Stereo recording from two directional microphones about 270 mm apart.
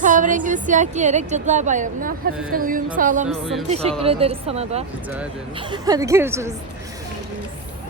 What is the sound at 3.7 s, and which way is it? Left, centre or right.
A woman's voice, right.